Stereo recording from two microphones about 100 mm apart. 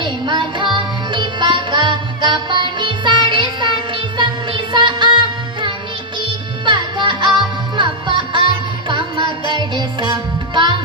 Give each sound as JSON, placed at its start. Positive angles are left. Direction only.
{"t": 0.0, "sound": "music", "side_deg": -50}